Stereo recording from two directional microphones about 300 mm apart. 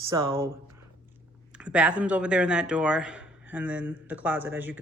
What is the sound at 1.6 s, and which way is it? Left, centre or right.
Speech, centre.